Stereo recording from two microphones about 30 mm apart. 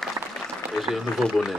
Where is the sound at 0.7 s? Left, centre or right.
Centre.